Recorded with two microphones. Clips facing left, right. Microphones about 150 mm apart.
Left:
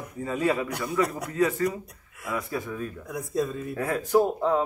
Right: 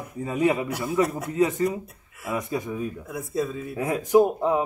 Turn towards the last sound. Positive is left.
turn(degrees=-15)  # may be behind; listen again after turning